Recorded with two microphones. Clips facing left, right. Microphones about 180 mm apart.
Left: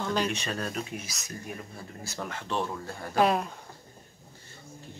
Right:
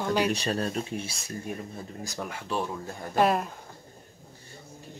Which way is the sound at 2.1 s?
10° right (ahead or behind).